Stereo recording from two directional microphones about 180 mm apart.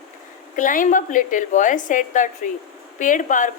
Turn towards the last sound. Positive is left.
turn(degrees=45)  # may be behind; listen again after turning